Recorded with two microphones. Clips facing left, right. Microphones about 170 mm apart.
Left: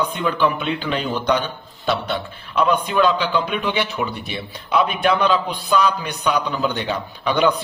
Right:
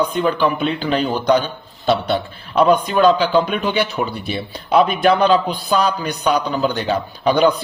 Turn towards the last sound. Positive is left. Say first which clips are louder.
# right 4 dB
turn(degrees=-35)  # may be behind; listen again after turning